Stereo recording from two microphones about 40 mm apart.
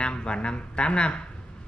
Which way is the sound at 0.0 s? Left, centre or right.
Left.